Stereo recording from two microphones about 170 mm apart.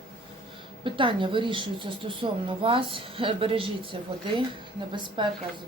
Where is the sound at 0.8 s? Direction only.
30° right (ahead or behind).